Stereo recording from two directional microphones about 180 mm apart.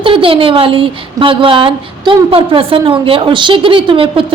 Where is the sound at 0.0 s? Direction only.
30° right (ahead or behind).